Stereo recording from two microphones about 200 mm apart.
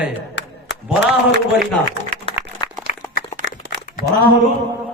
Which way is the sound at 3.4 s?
45° right (ahead or behind).